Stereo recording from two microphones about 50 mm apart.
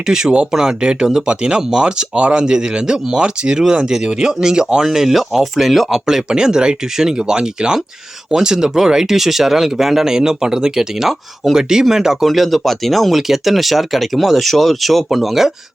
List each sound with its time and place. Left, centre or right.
0.0 s speech: centre